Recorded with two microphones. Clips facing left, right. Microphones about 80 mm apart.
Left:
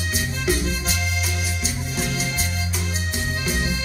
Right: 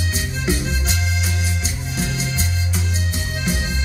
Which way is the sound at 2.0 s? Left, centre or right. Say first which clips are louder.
Right 2 dB; left.